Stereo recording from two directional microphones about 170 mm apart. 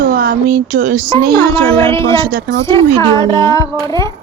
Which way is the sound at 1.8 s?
15° left (ahead or behind).